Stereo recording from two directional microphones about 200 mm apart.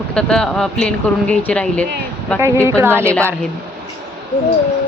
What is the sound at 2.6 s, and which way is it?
Speech, 15° right (ahead or behind).